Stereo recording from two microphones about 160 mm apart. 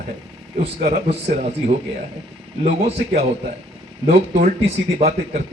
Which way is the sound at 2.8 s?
40° right (ahead or behind).